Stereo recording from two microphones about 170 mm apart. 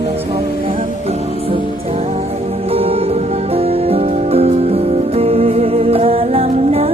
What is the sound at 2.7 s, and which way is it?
Music, 35° right (ahead or behind).